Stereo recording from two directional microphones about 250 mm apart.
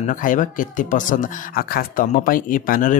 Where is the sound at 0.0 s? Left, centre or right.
Left.